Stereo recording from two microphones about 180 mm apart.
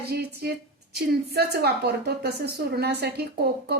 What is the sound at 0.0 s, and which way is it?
A woman's voice, 60° right (ahead or behind).